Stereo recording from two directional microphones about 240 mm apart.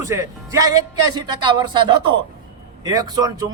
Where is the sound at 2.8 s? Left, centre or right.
Centre.